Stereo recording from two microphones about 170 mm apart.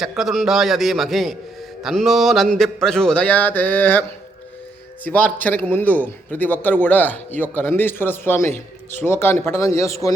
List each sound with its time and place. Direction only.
0.2 s speech: centre (ahead or behind)
5.0 s a man's voice: 10° left (ahead or behind)